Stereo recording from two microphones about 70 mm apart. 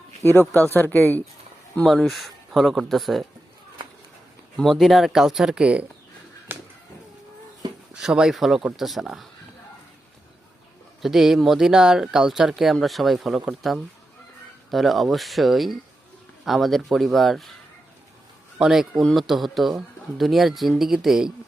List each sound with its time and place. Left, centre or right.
0.2 s speech: left
1.8 s speech: centre
4.5 s speech: centre
6.5 s music: right
7.9 s speech: centre
11.0 s speech: centre
18.6 s speech: centre